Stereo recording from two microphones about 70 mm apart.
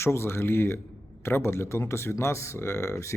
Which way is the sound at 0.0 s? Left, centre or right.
Left.